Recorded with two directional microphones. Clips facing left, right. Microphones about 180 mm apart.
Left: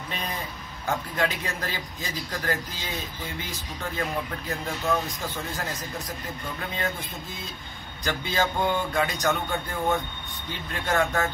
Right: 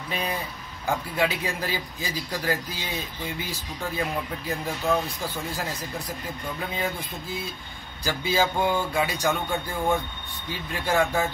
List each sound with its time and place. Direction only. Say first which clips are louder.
0.1 s a sound: right 5 dB; 10° right (ahead or behind)
0.8 s speech: right 2 dB; 10° right (ahead or behind)
3.9 s speech: right 1 dB; 15° right (ahead or behind)
8.0 s speech: right 2 dB; 5° right (ahead or behind)